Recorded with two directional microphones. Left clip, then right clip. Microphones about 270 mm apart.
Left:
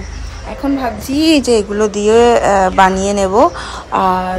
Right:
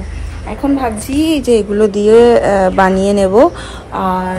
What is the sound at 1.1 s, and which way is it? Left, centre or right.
A woman's voice, centre.